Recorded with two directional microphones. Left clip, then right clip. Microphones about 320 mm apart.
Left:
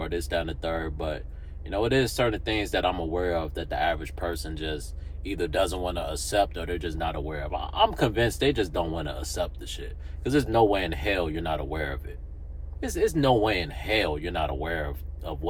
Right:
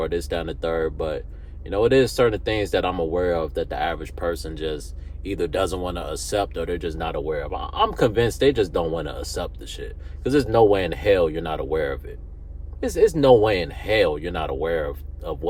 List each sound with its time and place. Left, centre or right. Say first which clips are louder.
0.0 s speech: right 4 dB; centre
13.1 s speech: right 6 dB; centre